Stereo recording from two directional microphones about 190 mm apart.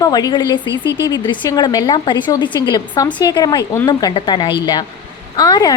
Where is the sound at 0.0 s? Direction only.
20° left (ahead or behind).